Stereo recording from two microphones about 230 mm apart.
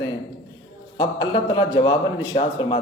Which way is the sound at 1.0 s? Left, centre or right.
Centre.